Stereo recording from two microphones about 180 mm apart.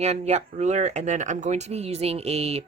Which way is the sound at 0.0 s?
40° right (ahead or behind).